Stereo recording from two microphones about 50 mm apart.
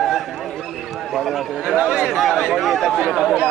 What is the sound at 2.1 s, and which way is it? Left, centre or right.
Speech, centre.